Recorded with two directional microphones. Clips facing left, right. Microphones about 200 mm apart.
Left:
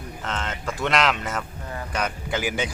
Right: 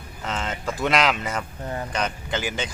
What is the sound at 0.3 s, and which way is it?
Speech, centre (ahead or behind).